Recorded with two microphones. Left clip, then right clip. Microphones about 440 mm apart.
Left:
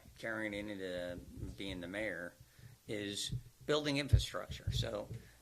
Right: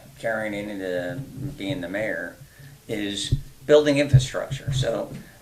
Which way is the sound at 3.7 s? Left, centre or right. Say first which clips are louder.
Right 18 dB; left.